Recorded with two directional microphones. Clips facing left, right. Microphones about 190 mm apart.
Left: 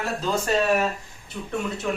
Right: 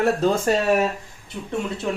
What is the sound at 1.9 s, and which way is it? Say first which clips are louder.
Speech: right 1 dB; 25° right (ahead or behind).